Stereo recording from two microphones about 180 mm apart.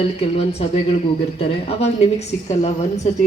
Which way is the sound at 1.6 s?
35° left (ahead or behind).